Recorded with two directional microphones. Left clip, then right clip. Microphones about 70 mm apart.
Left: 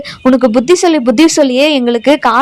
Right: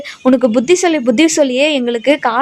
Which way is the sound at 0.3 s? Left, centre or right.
Centre.